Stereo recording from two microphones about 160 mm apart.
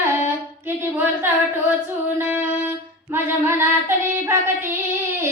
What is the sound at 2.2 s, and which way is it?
Music, 15° right (ahead or behind).